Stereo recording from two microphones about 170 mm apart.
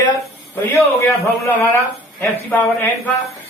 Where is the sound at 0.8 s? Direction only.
15° left (ahead or behind).